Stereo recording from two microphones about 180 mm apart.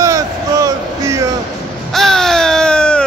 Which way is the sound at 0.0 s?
15° right (ahead or behind).